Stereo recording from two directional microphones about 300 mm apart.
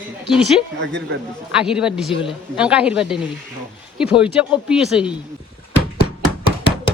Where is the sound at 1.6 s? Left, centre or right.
Centre.